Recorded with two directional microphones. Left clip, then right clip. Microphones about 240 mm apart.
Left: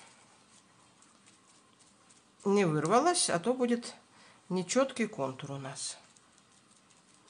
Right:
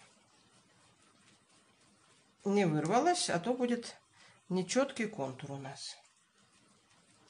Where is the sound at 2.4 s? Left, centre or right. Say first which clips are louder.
Left 3 dB; left.